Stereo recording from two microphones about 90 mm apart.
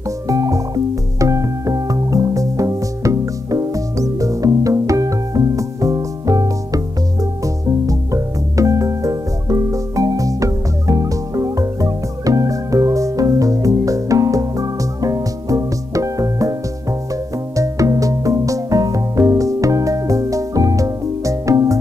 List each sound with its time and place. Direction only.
0.3 s music: 40° right (ahead or behind)
17.6 s music: 40° right (ahead or behind)